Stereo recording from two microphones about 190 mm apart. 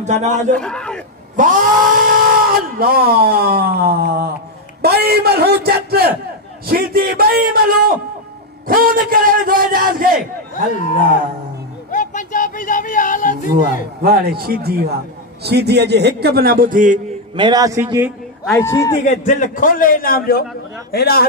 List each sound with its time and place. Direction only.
0.0 s a man's voice: 40° right (ahead or behind)
0.6 s a sound: 5° left (ahead or behind)
1.3 s speech: 45° right (ahead or behind)
4.8 s a sound: 55° right (ahead or behind)
6.6 s a man's voice: 55° right (ahead or behind)
11.9 s a sound: 40° left (ahead or behind)
14.0 s a man's voice: 55° right (ahead or behind)
17.4 s a man's voice: 20° right (ahead or behind)
18.6 s a man's voice: 15° left (ahead or behind)
19.0 s a man's voice: 45° left (ahead or behind)